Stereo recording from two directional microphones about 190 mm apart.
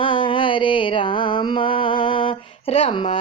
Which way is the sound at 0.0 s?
25° left (ahead or behind).